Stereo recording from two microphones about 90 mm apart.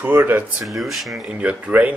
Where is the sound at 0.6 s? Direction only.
Centre (ahead or behind).